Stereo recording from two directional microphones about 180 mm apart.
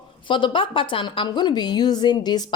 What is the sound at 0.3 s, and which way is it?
A woman's voice, 25° left (ahead or behind).